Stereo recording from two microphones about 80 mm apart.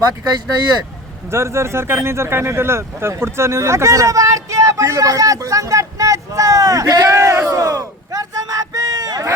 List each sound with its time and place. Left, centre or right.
1.3 s speech: right